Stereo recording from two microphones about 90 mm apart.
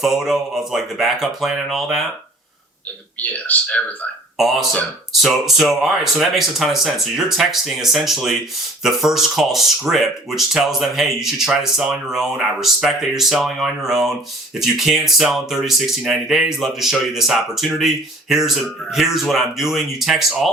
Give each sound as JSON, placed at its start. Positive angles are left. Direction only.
{"t": 0.0, "sound": "speech", "side_deg": -5}
{"t": 3.2, "sound": "speech", "side_deg": 15}
{"t": 4.4, "sound": "speech", "side_deg": 0}